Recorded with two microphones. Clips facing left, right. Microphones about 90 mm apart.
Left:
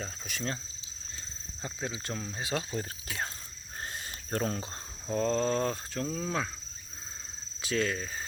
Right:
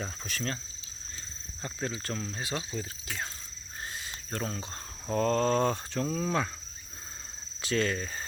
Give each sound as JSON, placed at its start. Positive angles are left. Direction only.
{"t": 0.3, "sound": "speech", "side_deg": 15}
{"t": 1.6, "sound": "speech", "side_deg": 10}
{"t": 2.6, "sound": "speech", "side_deg": 45}
{"t": 3.8, "sound": "a sound", "side_deg": 45}
{"t": 4.4, "sound": "cricket", "side_deg": 35}
{"t": 5.0, "sound": "speech", "side_deg": 5}
{"t": 7.6, "sound": "speech", "side_deg": 5}